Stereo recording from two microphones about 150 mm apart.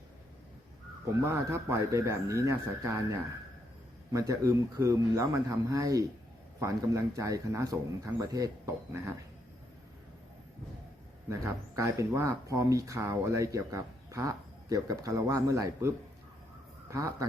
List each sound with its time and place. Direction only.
1.0 s speech: 20° right (ahead or behind)
11.3 s speech: 20° right (ahead or behind)
16.9 s speech: 20° right (ahead or behind)